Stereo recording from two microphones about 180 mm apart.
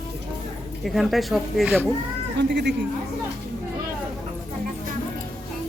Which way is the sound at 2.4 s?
70° right (ahead or behind).